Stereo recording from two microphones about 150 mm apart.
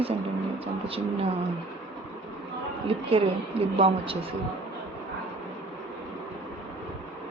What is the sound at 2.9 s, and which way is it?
Speech, 40° right (ahead or behind).